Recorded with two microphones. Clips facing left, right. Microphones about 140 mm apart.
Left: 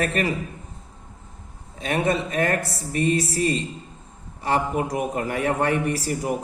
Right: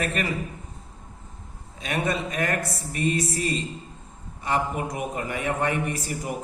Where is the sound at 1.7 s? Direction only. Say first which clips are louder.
Left 4 dB; 35° left (ahead or behind).